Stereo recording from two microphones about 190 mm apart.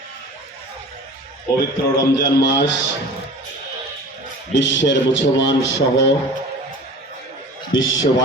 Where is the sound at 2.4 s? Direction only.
70° left (ahead or behind).